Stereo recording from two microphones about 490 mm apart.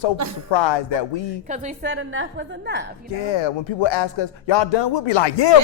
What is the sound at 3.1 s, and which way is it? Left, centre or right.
Speech, left.